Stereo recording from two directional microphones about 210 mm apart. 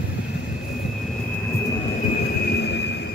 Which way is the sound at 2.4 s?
50° left (ahead or behind).